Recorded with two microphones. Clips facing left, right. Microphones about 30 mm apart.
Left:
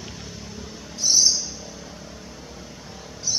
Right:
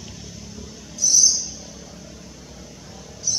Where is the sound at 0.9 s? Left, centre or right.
Left.